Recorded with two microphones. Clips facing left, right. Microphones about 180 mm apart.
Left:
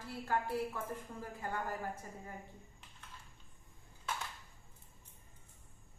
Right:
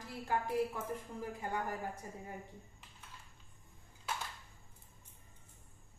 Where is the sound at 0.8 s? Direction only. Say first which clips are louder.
Right 2 dB; 15° right (ahead or behind).